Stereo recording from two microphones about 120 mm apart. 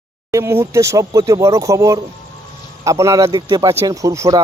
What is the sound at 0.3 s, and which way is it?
Speech, 25° right (ahead or behind).